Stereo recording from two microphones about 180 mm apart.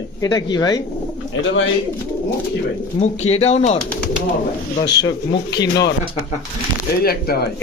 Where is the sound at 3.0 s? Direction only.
35° left (ahead or behind).